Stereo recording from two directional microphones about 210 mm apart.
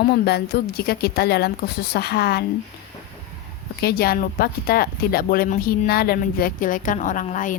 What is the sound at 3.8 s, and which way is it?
Speech, 45° left (ahead or behind).